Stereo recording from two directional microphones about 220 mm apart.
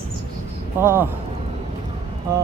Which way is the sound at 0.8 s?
10° right (ahead or behind).